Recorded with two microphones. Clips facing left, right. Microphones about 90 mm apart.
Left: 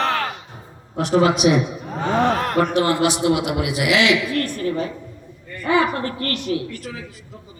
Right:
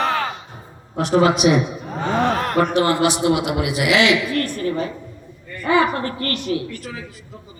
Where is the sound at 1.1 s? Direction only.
40° right (ahead or behind).